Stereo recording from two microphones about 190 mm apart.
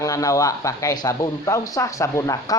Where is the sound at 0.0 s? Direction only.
15° left (ahead or behind).